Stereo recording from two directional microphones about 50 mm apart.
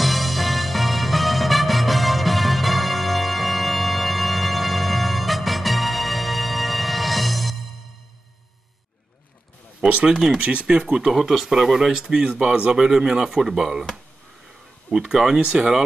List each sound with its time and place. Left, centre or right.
0.0 s music: centre
9.8 s speech: right
15.0 s speech: centre